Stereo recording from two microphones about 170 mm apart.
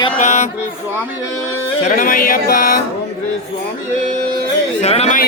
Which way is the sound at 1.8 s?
50° left (ahead or behind).